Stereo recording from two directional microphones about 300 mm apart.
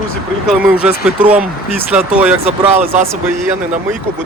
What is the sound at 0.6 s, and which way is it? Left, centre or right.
Speech, centre.